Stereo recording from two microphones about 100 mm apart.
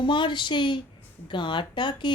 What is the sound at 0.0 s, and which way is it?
Speech, 50° left (ahead or behind).